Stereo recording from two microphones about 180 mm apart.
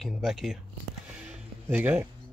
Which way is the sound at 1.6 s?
10° right (ahead or behind).